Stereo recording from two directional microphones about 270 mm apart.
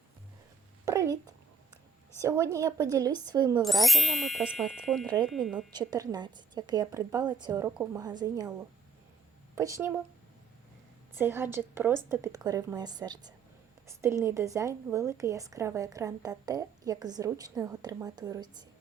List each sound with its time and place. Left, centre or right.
0.9 s a sound: centre
2.2 s a woman's voice: centre
3.6 s speech: centre
5.0 s a woman's voice: centre
5.3 s speech: centre
5.7 s a woman's voice: centre
9.6 s a woman's voice: centre
11.1 s a woman's voice: centre